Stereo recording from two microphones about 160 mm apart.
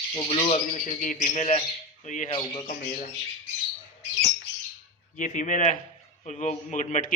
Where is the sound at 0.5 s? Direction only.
45° left (ahead or behind).